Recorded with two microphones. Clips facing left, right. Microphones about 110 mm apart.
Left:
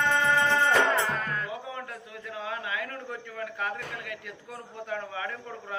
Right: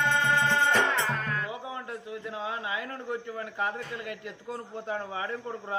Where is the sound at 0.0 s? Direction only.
Centre (ahead or behind).